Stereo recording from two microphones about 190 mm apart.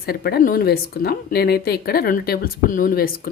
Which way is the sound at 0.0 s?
55° left (ahead or behind).